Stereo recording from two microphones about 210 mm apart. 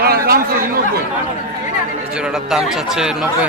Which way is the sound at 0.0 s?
45° right (ahead or behind).